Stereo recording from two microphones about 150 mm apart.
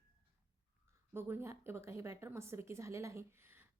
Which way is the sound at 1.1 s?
15° right (ahead or behind).